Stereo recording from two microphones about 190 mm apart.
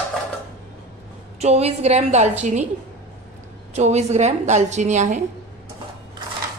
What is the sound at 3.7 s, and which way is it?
A woman's voice, 35° right (ahead or behind).